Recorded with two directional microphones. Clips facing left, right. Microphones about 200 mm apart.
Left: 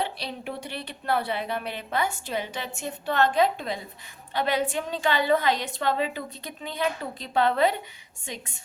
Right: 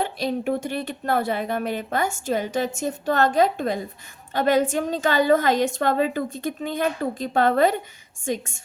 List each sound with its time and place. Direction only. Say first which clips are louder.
0.0 s speech: right 7 dB; 45° right (ahead or behind)